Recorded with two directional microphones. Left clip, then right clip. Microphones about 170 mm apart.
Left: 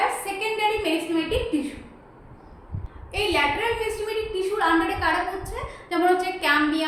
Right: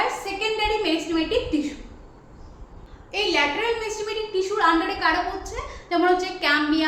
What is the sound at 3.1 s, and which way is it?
A woman's voice, 15° right (ahead or behind).